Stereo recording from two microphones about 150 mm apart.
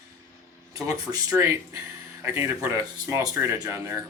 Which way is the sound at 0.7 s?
25° right (ahead or behind).